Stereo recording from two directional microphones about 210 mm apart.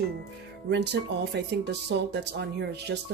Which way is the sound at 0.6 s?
55° right (ahead or behind).